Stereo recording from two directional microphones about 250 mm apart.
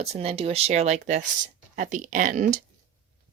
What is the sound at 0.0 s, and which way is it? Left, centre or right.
Speech, right.